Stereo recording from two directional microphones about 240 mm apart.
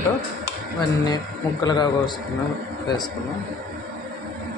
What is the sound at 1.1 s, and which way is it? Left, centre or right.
A man's voice, centre.